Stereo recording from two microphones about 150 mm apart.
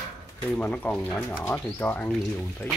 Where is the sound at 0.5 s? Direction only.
10° left (ahead or behind).